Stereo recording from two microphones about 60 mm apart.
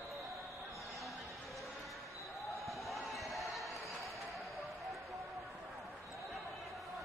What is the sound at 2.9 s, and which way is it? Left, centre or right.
Basketball bounce, centre.